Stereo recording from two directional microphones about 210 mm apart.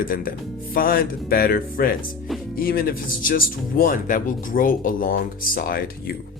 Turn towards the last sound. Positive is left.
turn(degrees=45)  # may be behind; listen again after turning